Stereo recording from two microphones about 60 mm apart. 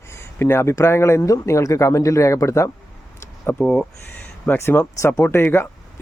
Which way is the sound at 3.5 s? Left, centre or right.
Centre.